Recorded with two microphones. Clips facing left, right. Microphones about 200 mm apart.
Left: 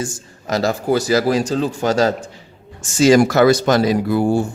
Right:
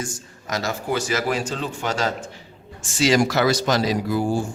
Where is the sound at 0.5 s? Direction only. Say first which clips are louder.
Left 7 dB; 35° left (ahead or behind).